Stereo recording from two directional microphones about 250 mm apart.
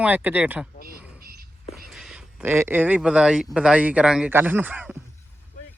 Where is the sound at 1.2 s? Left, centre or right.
Right.